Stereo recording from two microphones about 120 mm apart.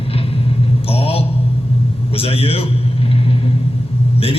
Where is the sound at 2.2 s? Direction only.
55° left (ahead or behind).